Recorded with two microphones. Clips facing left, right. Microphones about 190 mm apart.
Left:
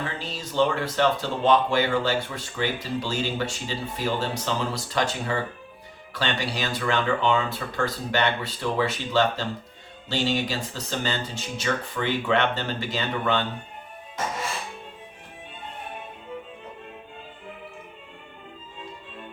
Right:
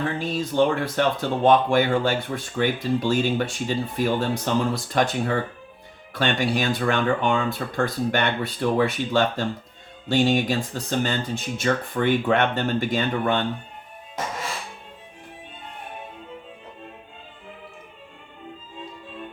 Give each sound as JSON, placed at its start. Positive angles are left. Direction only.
{"t": 0.1, "sound": "speech", "side_deg": -55}